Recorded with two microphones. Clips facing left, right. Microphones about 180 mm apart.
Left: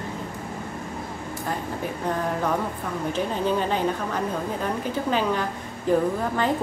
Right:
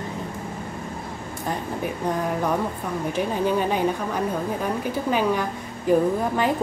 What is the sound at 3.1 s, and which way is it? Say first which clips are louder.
A woman's voice: right 2 dB; 10° right (ahead or behind).